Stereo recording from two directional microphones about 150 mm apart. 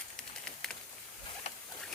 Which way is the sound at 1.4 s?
45° left (ahead or behind).